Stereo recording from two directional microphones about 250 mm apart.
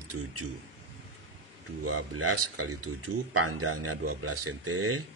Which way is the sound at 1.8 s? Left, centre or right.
Right.